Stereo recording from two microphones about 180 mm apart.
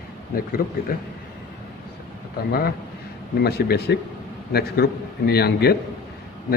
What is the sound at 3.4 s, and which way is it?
A man's voice, 60° left (ahead or behind).